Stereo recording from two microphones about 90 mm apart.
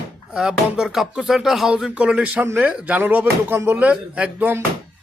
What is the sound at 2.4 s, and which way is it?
A man's voice, 25° right (ahead or behind).